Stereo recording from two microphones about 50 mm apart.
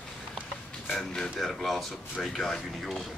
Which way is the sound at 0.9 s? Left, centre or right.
Centre.